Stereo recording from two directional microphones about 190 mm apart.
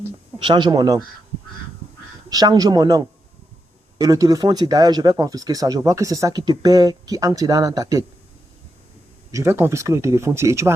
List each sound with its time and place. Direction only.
0.4 s speech: 25° right (ahead or behind)
2.3 s speech: 20° right (ahead or behind)
9.3 s speech: 15° right (ahead or behind)